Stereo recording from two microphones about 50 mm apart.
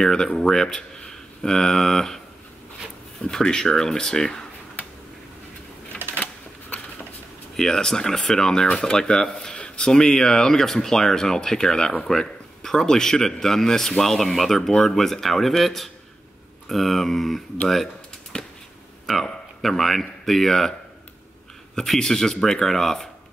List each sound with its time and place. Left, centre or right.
0.0 s speech: centre
6.1 s a sound: left
7.5 s speech: centre
18.3 s a sound: centre
19.2 s speech: centre
21.7 s speech: centre